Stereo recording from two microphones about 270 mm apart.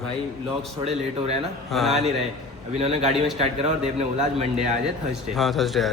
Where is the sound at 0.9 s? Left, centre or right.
Right.